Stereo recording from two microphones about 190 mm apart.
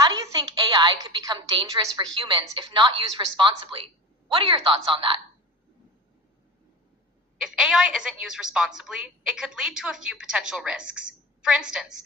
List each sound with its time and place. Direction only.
0.5 s a woman's voice: 25° right (ahead or behind)
7.3 s a woman's voice: 5° right (ahead or behind)